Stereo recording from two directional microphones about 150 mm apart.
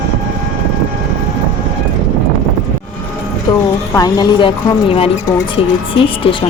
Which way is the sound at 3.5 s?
30° left (ahead or behind).